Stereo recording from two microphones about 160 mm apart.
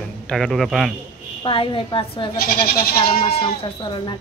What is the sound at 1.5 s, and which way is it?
Speech, 35° left (ahead or behind).